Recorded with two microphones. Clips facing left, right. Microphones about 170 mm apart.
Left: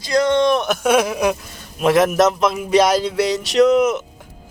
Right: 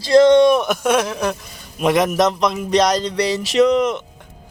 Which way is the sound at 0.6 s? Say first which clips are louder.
Left 1 dB; 5° left (ahead or behind).